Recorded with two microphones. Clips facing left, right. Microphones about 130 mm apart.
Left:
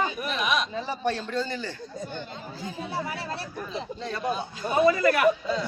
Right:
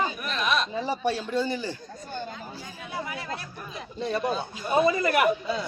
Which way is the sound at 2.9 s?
30° left (ahead or behind).